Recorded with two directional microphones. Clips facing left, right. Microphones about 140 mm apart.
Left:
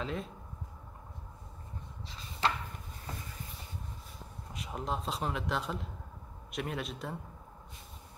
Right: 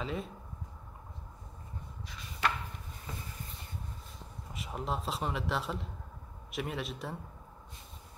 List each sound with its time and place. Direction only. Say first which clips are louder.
0.0 s a man's voice: even; centre (ahead or behind)
2.0 s chopping: left 1 dB; 25° left (ahead or behind)
4.5 s a man's voice: even; centre (ahead or behind)